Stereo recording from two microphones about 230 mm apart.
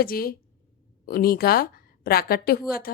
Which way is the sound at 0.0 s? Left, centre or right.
Left.